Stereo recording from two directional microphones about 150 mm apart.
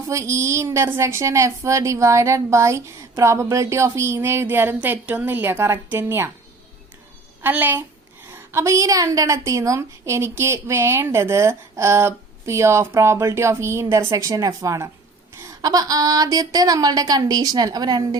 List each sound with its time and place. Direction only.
0.1 s a woman's voice: 20° right (ahead or behind)
7.4 s a child's voice: 15° right (ahead or behind)